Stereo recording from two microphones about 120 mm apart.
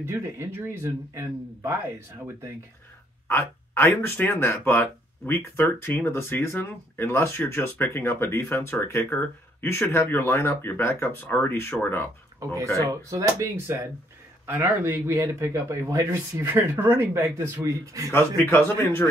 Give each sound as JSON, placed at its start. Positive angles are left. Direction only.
{"t": 0.0, "sound": "speech", "side_deg": -20}
{"t": 3.3, "sound": "speech", "side_deg": 20}
{"t": 12.4, "sound": "speech", "side_deg": -25}
{"t": 18.1, "sound": "speech", "side_deg": 20}